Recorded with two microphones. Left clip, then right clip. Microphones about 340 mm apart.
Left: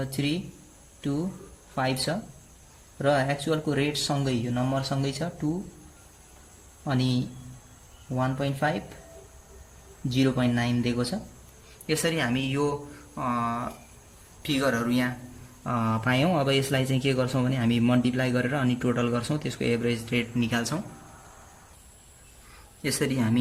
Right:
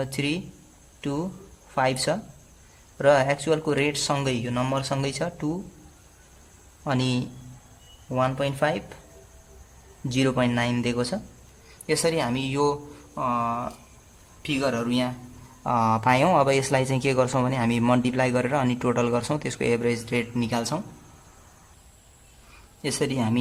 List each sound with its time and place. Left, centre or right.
0.1 s speech: right
1.7 s speech: centre
6.8 s speech: centre
10.1 s speech: right
22.8 s speech: centre